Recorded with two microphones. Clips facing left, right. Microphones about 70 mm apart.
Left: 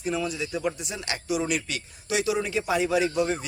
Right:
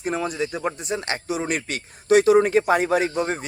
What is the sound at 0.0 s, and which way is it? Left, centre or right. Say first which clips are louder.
Speech: right 4 dB; right.